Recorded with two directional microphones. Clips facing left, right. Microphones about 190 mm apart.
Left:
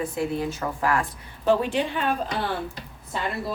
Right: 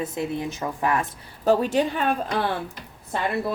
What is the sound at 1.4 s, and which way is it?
Speech, 40° right (ahead or behind).